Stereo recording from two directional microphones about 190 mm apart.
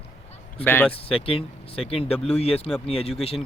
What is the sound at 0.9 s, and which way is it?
Speech, 30° left (ahead or behind).